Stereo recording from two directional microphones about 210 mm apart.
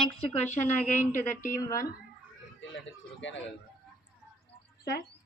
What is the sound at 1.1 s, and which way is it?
Speech, 40° left (ahead or behind).